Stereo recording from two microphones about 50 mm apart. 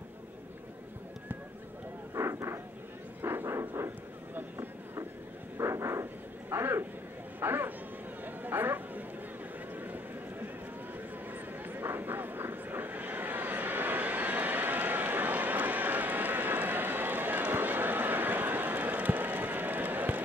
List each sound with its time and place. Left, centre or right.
2.1 s vehicle: right
3.2 s vehicle: right
3.5 s vehicle: right
5.6 s vehicle: right
6.5 s a sound: right
11.6 s vehicle: right